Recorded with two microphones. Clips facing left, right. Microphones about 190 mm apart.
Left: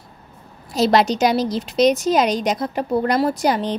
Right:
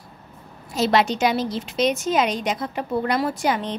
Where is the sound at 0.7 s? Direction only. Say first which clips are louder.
Left 3 dB; 40° left (ahead or behind).